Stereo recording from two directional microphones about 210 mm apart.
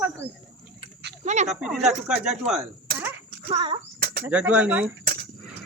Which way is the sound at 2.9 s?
45° right (ahead or behind).